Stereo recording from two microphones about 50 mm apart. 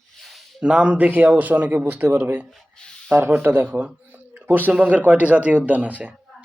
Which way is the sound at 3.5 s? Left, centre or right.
Right.